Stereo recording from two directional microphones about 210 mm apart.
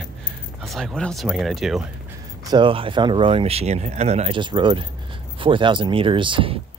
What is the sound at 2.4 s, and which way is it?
Speech, 20° right (ahead or behind).